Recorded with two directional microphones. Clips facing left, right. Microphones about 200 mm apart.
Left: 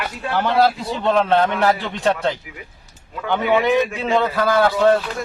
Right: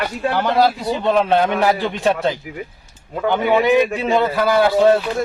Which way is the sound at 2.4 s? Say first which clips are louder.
Right 9 dB; 45° right (ahead or behind).